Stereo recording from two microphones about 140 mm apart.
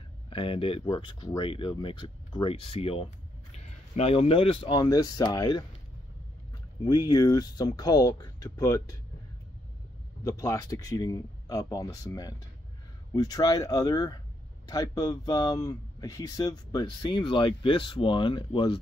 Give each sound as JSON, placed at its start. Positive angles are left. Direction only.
{"t": 0.3, "sound": "speech", "side_deg": 40}
{"t": 3.5, "sound": "speech", "side_deg": 50}
{"t": 6.8, "sound": "speech", "side_deg": 30}
{"t": 10.2, "sound": "speech", "side_deg": 25}